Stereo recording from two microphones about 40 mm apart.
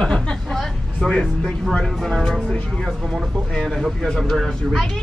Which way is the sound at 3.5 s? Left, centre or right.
Centre.